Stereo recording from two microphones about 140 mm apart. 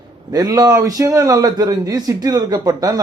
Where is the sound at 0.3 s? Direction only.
30° right (ahead or behind).